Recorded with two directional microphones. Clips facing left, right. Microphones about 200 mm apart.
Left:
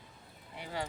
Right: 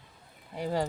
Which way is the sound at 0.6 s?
40° right (ahead or behind).